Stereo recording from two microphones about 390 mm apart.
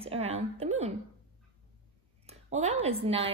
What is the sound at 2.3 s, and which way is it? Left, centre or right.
A woman's voice, centre.